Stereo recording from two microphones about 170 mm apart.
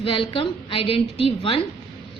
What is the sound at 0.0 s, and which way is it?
A woman's voice, 30° left (ahead or behind).